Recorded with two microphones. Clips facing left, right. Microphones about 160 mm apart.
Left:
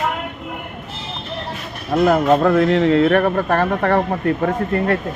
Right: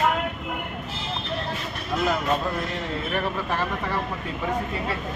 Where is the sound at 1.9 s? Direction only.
55° left (ahead or behind).